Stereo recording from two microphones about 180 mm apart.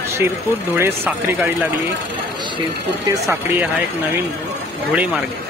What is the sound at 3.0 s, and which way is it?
Speech, 15° right (ahead or behind).